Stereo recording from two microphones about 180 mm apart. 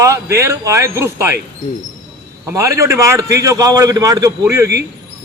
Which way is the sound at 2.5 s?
15° right (ahead or behind).